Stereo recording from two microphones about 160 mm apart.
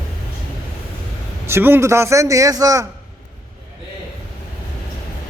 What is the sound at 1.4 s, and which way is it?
A man's voice, 15° right (ahead or behind).